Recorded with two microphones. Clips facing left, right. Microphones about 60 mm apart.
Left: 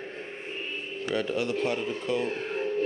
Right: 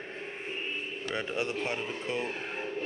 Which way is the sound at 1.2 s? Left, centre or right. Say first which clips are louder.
Left 5 dB; right.